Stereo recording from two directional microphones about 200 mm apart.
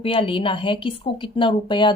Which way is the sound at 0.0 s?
25° left (ahead or behind).